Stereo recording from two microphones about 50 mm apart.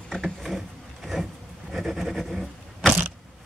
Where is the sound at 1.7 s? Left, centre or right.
Centre.